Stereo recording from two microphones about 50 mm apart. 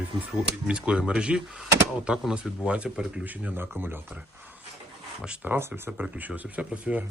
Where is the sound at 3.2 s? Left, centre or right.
Right.